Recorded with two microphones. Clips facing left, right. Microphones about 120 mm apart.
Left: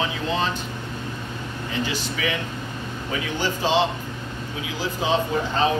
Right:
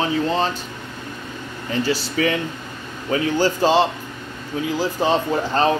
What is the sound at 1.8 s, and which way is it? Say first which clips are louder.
Speech: right 10 dB; 40° right (ahead or behind).